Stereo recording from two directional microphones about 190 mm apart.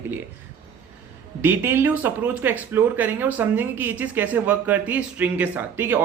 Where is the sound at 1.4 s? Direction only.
10° right (ahead or behind).